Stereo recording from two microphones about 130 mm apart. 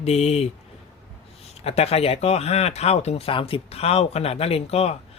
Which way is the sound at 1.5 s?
55° left (ahead or behind).